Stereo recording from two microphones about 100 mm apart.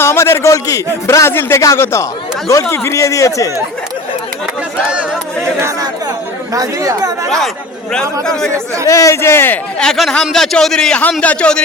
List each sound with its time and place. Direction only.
0.0 s a man's voice: 25° left (ahead or behind)
5.5 s speech: 30° right (ahead or behind)
7.3 s a man's voice: 5° left (ahead or behind)
8.9 s speech: 30° left (ahead or behind)
9.8 s a man's voice: 5° left (ahead or behind)